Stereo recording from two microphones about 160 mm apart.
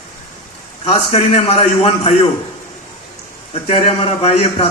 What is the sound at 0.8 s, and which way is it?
A man's voice, 40° left (ahead or behind).